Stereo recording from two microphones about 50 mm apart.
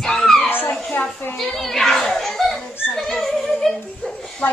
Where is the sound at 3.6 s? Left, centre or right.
Centre.